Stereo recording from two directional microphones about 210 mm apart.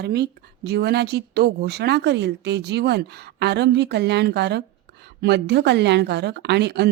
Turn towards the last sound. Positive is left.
turn(degrees=-55)  # may be behind; listen again after turning